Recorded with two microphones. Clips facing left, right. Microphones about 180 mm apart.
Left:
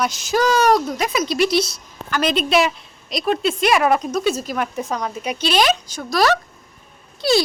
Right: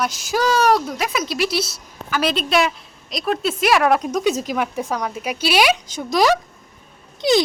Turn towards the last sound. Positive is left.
turn(degrees=-20)  # may be behind; listen again after turning